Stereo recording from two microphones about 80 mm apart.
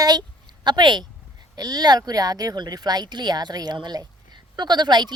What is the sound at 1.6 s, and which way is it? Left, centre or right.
Speech, right.